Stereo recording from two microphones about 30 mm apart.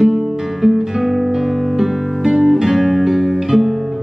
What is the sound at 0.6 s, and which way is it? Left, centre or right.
Music, centre.